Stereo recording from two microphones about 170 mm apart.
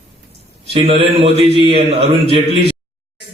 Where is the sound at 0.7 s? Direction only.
35° right (ahead or behind).